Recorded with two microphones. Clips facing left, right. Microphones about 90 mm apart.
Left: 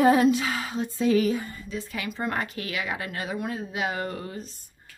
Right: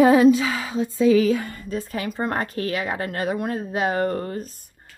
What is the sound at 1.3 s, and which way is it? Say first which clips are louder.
Speech: right 4 dB; 80° right.